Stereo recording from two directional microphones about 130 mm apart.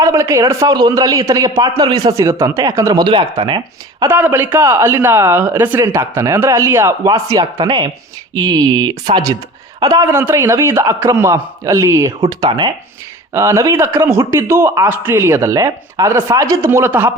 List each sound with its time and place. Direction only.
0.0 s a man's voice: 20° right (ahead or behind)
3.0 s speech: 40° right (ahead or behind)
4.1 s a man's voice: 15° right (ahead or behind)
12.5 s speech: 35° right (ahead or behind)
13.3 s a man's voice: 25° right (ahead or behind)